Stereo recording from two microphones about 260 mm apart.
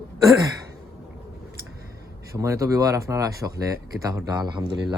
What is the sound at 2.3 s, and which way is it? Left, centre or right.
Speech, centre.